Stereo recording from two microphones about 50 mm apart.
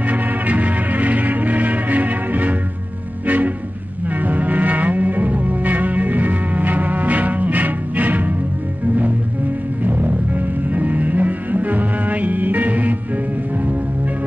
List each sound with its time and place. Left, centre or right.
0.0 s music: right
9.8 s music: right